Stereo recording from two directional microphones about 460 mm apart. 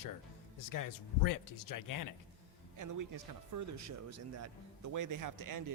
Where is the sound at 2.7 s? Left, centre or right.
Right.